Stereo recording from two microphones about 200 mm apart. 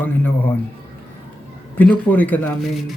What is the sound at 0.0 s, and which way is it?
Speech, 10° left (ahead or behind).